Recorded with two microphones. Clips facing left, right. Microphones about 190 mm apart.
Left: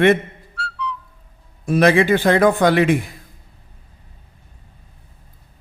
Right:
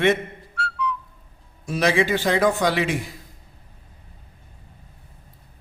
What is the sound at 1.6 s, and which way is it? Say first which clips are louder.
A man's voice: left 6 dB; 55° left (ahead or behind).